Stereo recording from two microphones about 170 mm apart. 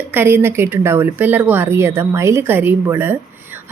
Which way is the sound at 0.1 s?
10° right (ahead or behind).